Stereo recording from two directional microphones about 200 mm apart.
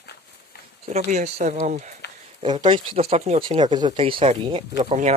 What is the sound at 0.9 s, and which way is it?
Speech, 35° right (ahead or behind).